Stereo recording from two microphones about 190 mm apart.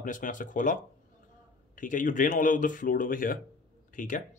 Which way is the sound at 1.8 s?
45° left (ahead or behind).